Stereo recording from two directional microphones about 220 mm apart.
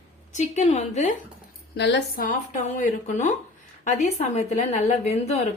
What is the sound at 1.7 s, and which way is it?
Speech, 50° left (ahead or behind).